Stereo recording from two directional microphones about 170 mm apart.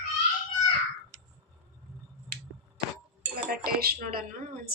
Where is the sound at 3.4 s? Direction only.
60° right (ahead or behind).